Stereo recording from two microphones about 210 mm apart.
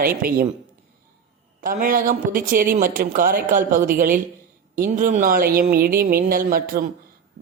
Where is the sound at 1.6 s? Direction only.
40° right (ahead or behind).